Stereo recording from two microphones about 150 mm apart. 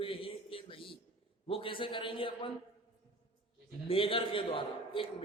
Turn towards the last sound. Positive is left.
turn(degrees=35)  # may be behind; listen again after turning